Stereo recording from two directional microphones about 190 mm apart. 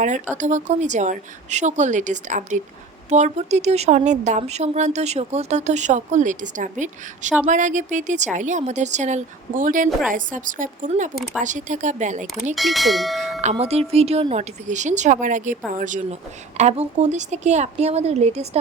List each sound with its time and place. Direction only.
0.0 s a woman's voice: 40° right (ahead or behind)
12.5 s speech: centre (ahead or behind)
13.4 s speech: 35° right (ahead or behind)